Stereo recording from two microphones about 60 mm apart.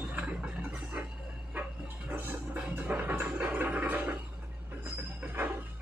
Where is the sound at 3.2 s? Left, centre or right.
Right.